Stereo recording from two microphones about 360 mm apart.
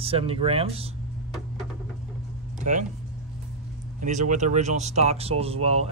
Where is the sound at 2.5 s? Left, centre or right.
Centre.